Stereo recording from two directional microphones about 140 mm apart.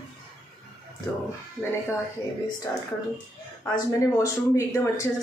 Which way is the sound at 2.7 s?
15° left (ahead or behind).